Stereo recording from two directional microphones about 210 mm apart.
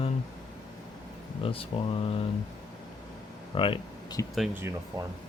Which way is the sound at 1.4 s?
25° left (ahead or behind).